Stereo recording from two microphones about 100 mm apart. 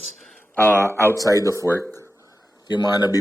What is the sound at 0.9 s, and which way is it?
Speech, 20° left (ahead or behind).